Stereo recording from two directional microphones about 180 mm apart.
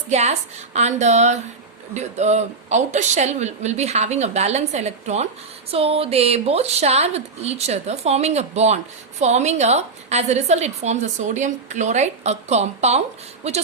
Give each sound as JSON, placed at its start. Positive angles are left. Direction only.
{"t": 0.1, "sound": "a woman's voice", "side_deg": -40}